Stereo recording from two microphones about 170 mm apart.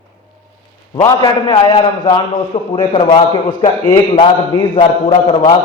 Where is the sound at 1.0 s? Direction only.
20° left (ahead or behind).